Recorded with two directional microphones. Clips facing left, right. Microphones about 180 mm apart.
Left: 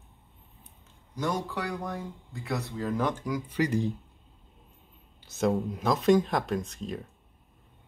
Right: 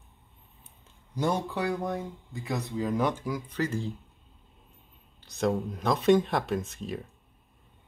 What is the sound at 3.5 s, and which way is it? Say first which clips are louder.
Speech: left 5 dB; 15° left (ahead or behind).